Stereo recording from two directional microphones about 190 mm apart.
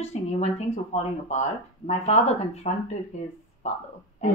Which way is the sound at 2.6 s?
35° left (ahead or behind).